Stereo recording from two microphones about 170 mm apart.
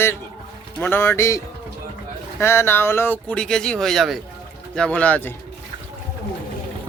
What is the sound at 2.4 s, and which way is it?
Speech, 15° left (ahead or behind).